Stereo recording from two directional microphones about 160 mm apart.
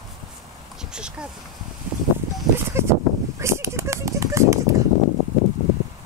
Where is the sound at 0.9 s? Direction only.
5° right (ahead or behind).